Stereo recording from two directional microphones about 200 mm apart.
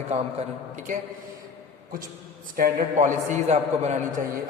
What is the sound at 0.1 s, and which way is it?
Speech, 35° right (ahead or behind).